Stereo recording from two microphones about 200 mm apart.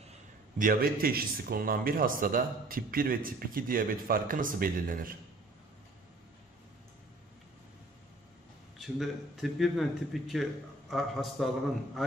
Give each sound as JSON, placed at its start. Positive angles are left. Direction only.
{"t": 0.1, "sound": "a man's voice", "side_deg": -40}
{"t": 8.7, "sound": "a man's voice", "side_deg": 0}